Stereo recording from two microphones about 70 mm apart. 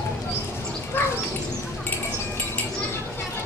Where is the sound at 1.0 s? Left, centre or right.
Left.